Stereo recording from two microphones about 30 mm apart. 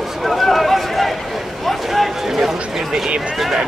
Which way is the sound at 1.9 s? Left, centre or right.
Centre.